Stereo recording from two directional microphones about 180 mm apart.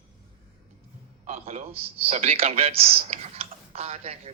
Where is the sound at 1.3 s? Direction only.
35° right (ahead or behind).